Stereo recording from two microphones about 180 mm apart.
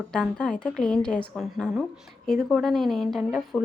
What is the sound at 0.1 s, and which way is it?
A woman's voice, 5° left (ahead or behind).